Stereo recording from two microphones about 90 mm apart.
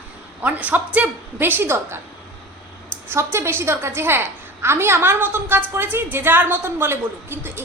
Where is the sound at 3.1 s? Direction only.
30° right (ahead or behind).